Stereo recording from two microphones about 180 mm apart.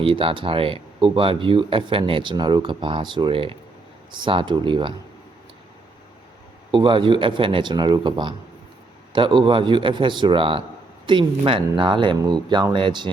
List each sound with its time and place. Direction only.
0.0 s speech: 30° right (ahead or behind)
6.7 s speech: 30° right (ahead or behind)